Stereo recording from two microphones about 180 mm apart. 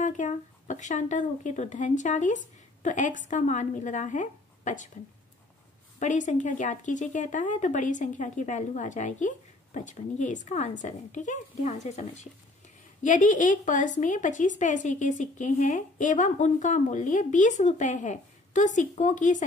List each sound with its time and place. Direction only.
0.0 s a woman's voice: 45° left (ahead or behind)
5.9 s a woman's voice: 45° left (ahead or behind)